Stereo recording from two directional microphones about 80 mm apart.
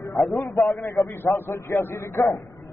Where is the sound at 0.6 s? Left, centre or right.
Left.